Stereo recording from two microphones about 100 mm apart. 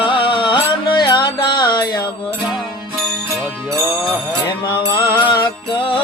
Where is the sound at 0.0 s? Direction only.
55° left (ahead or behind).